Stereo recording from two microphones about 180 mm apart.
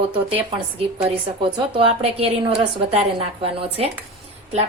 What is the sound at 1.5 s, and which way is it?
A woman's voice, 30° right (ahead or behind).